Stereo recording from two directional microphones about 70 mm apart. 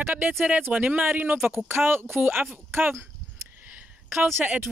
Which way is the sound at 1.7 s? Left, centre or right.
Right.